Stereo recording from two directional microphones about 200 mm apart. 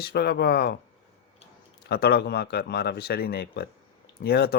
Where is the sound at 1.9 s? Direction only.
55° left (ahead or behind).